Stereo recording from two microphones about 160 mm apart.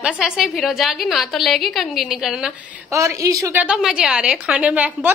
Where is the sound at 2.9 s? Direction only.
20° right (ahead or behind).